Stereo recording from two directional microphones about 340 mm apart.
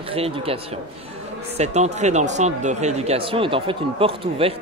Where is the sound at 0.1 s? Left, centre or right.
Centre.